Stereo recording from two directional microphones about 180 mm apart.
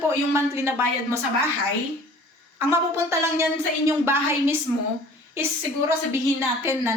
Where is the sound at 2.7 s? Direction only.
15° right (ahead or behind).